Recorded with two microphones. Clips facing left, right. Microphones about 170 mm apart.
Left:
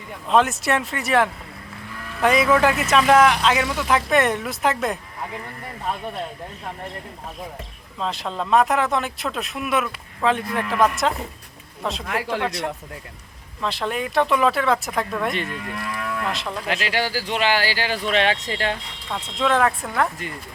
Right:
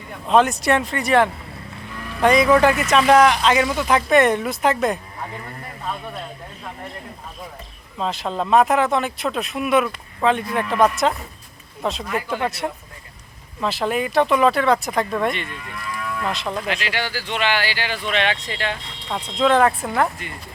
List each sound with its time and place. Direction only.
0.3 s speech: centre (ahead or behind)
7.9 s speech: centre (ahead or behind)
12.0 s speech: 80° left
12.4 s speech: 5° right (ahead or behind)
15.3 s speech: 40° left (ahead or behind)
16.3 s speech: centre (ahead or behind)
16.6 s speech: 40° left (ahead or behind)
19.4 s speech: centre (ahead or behind)